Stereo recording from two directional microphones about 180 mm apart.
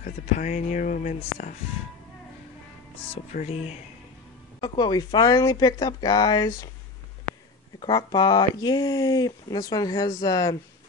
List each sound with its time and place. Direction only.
0.0 s speech: 45° left (ahead or behind)
3.3 s speech: 40° left (ahead or behind)
4.6 s speech: 25° left (ahead or behind)
7.8 s speech: 25° left (ahead or behind)